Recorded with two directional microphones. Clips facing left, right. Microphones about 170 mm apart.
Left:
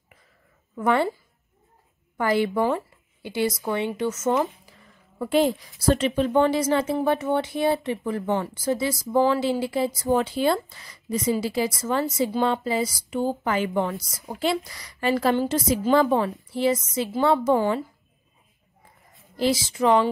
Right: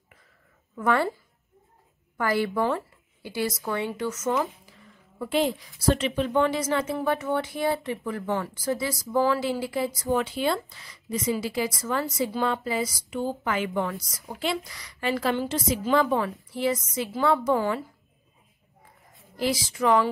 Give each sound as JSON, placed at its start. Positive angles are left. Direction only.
{"t": 0.7, "sound": "a woman's voice", "side_deg": 20}
{"t": 2.1, "sound": "a woman's voice", "side_deg": 20}
{"t": 5.2, "sound": "a woman's voice", "side_deg": 45}
{"t": 10.0, "sound": "a woman's voice", "side_deg": 35}
{"t": 14.2, "sound": "a woman's voice", "side_deg": 35}
{"t": 19.3, "sound": "a woman's voice", "side_deg": 25}